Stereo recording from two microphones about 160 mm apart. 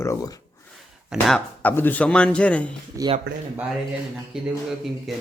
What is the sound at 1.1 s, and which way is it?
Speech, 5° right (ahead or behind).